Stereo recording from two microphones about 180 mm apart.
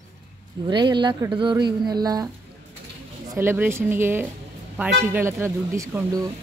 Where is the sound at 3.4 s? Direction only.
10° right (ahead or behind).